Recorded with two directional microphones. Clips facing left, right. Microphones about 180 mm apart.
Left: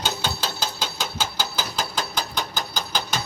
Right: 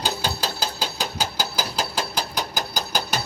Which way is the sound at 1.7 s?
5° right (ahead or behind).